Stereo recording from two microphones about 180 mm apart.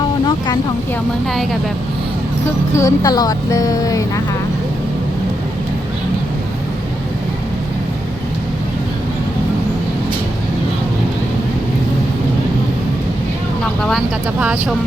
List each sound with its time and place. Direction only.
0.3 s speech: 25° left (ahead or behind)
2.7 s speech: 20° left (ahead or behind)
13.8 s speech: 5° right (ahead or behind)